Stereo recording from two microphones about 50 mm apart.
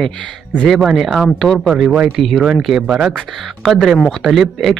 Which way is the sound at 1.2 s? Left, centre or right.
Centre.